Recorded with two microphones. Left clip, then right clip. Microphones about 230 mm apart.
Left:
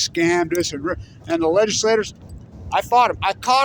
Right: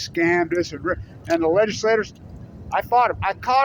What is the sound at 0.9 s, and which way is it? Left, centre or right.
A man's voice, left.